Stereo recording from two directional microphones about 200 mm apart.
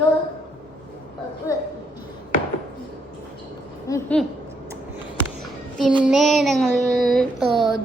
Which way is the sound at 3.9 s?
20° left (ahead or behind).